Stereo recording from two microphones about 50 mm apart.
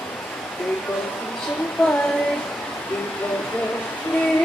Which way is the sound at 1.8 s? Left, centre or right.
Centre.